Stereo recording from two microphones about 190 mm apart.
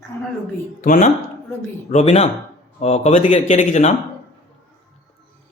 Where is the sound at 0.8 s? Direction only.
40° left (ahead or behind).